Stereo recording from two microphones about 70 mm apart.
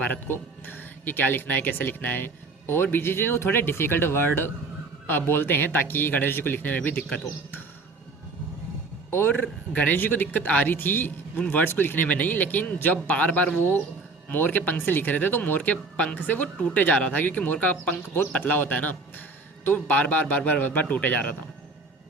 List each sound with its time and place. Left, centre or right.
0.0 s speech: left
9.0 s speech: left